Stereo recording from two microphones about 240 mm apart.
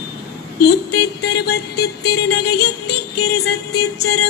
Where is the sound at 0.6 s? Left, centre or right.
Left.